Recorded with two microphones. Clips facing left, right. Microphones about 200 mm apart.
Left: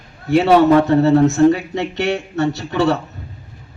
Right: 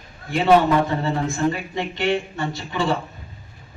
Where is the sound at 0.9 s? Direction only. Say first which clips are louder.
Left 11 dB; 70° left (ahead or behind).